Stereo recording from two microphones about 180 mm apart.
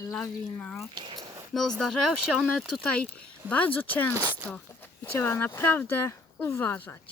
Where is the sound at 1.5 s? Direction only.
Centre (ahead or behind).